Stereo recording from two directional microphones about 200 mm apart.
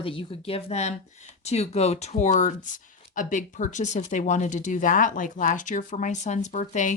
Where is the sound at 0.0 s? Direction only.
25° left (ahead or behind).